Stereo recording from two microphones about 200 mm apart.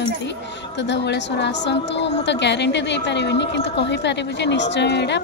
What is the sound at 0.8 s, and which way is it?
A woman's voice, 60° left (ahead or behind).